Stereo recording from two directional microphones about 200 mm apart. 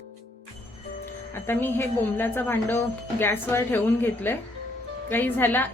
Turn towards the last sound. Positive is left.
turn(degrees=10)  # may be behind; listen again after turning